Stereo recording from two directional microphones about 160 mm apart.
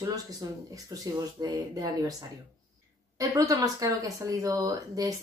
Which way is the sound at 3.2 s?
20° right (ahead or behind).